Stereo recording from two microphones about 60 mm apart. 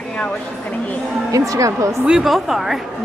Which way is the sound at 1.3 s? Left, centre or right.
Right.